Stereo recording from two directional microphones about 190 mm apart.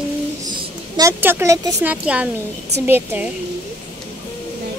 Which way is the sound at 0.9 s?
15° right (ahead or behind).